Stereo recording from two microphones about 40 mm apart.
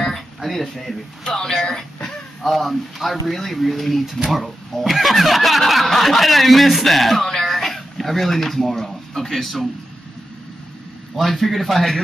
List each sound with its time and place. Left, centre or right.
0.4 s speech: centre
1.2 s speech: centre
1.7 s speech: centre
2.0 s speech: centre
11.1 s speech: centre